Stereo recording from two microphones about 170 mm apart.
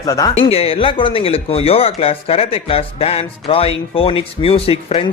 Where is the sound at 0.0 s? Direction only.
20° left (ahead or behind).